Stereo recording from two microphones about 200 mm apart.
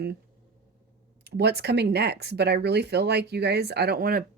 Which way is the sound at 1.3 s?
55° right (ahead or behind).